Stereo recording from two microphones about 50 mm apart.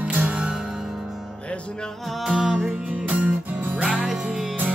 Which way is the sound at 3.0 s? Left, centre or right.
Right.